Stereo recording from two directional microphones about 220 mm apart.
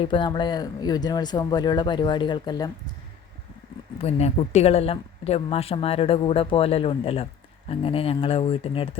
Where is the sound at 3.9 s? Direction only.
30° left (ahead or behind).